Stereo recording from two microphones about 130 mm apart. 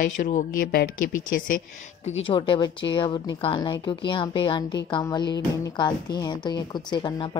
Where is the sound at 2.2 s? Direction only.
40° left (ahead or behind).